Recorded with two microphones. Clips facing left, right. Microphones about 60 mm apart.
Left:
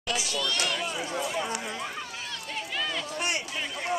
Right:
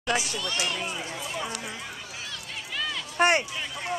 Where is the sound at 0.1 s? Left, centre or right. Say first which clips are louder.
Right 2 dB; right.